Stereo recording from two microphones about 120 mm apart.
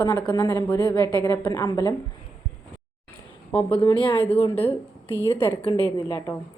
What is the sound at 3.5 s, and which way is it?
Speech, 10° left (ahead or behind).